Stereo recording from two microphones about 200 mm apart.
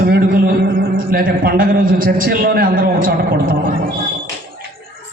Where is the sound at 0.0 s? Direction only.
50° right (ahead or behind).